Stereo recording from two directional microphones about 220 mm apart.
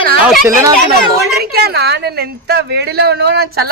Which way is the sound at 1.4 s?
45° right (ahead or behind).